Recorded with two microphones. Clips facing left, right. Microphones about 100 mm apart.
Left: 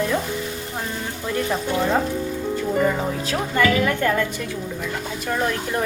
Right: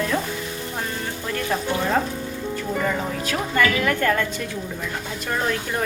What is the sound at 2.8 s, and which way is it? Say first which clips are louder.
Stir: left 4 dB; 15° left (ahead or behind).